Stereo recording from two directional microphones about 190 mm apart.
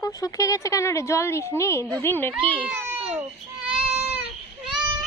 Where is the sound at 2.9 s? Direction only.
30° right (ahead or behind).